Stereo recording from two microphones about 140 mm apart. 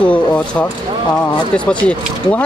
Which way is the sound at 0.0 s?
10° left (ahead or behind).